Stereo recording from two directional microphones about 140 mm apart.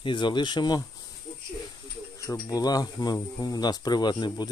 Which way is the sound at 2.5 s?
25° left (ahead or behind).